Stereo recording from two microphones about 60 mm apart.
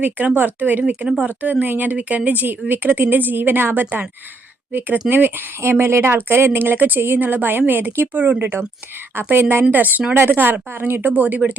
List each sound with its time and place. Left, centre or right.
0.3 s a woman's voice: right
5.0 s a woman's voice: right
5.9 s a woman's voice: right